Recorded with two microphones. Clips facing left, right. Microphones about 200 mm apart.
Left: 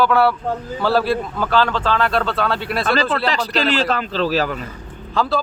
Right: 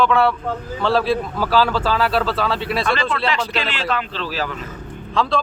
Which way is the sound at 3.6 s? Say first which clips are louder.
Left 5 dB; 40° left (ahead or behind).